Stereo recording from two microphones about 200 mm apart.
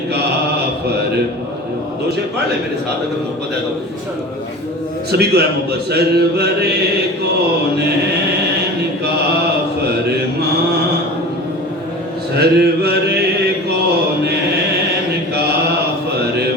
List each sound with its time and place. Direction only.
0.1 s mantra: 55° right (ahead or behind)
5.1 s speech: 55° right (ahead or behind)
12.4 s mantra: 55° right (ahead or behind)